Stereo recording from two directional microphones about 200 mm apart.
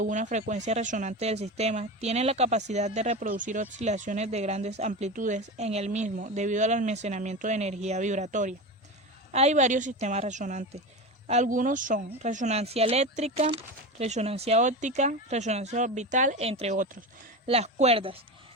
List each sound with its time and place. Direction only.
0.0 s speech: 40° right (ahead or behind)
16.7 s speech: 40° right (ahead or behind)
17.4 s speech: 30° right (ahead or behind)